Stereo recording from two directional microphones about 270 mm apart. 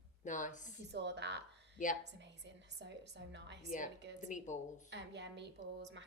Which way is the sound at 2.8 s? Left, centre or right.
Right.